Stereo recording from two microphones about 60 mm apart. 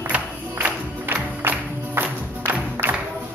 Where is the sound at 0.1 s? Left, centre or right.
Right.